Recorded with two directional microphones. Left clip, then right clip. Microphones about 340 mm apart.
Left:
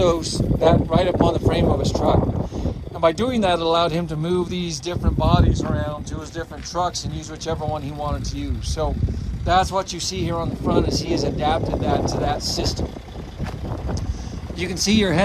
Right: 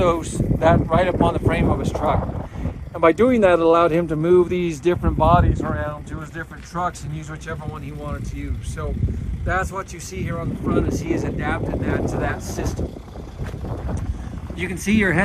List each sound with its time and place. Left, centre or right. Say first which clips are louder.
0.0 s speech: even; centre
9.6 s speech: left 8 dB; centre
14.6 s speech: even; centre